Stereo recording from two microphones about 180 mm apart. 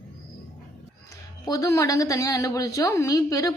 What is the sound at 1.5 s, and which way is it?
A woman's voice, 20° left (ahead or behind).